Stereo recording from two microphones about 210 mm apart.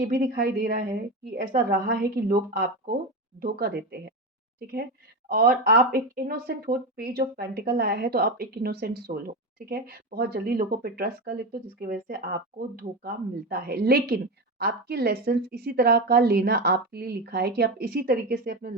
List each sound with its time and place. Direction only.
0.0 s speech: 45° right (ahead or behind)